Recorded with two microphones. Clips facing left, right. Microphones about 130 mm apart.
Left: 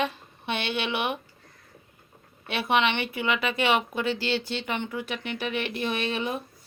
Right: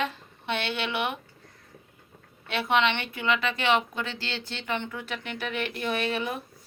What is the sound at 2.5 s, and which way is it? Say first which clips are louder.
Speech: even; 15° left (ahead or behind).